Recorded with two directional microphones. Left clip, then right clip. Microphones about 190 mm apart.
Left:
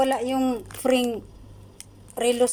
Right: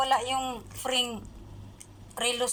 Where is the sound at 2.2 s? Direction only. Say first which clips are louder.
Left 7 dB; 40° left (ahead or behind).